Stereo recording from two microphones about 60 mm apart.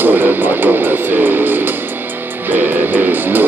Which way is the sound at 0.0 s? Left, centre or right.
Right.